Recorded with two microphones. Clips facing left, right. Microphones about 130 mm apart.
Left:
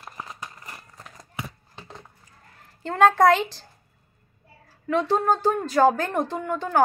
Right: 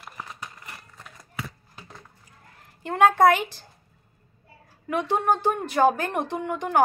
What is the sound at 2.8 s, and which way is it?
Speech, 15° right (ahead or behind).